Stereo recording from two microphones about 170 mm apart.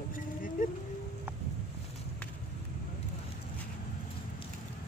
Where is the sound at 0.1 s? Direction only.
50° left (ahead or behind).